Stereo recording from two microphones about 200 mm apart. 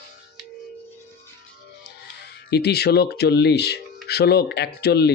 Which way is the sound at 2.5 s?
55° left (ahead or behind).